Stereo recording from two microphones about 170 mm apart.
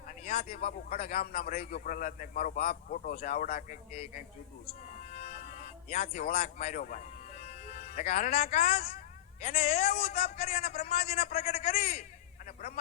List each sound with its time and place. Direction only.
0.3 s a man's voice: 55° left (ahead or behind)
4.9 s music: 40° left (ahead or behind)
6.3 s a man's voice: 40° left (ahead or behind)
10.1 s a man's voice: 65° left (ahead or behind)
10.3 s a man's voice: 40° left (ahead or behind)
10.6 s a man's voice: 65° left (ahead or behind)
10.8 s a man's voice: 35° left (ahead or behind)